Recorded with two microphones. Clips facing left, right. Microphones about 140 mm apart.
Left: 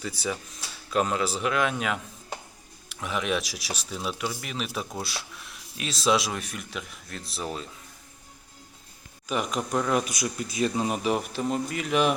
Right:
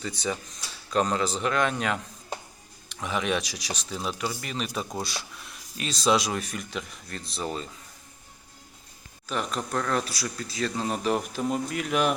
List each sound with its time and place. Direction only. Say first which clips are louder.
0.0 s speech: right 1 dB; 5° left (ahead or behind)
9.2 s speech: left 2 dB; 10° left (ahead or behind)